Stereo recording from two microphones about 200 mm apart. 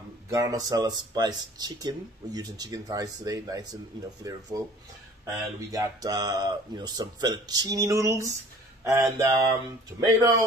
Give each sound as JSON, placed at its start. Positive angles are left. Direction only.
{"t": 0.3, "sound": "speech", "side_deg": -15}